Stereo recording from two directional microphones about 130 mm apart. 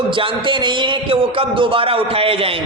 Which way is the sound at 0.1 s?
40° right (ahead or behind).